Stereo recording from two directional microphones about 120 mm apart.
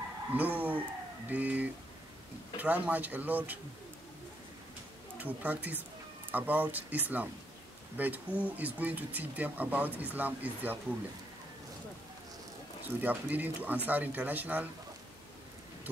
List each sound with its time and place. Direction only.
0.3 s speech: 15° right (ahead or behind)
5.1 s speech: 15° right (ahead or behind)
13.0 s speech: 15° right (ahead or behind)